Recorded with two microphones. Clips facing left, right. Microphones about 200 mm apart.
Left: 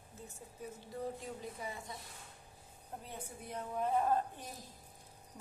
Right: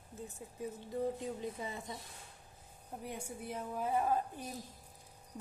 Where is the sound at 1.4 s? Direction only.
25° right (ahead or behind).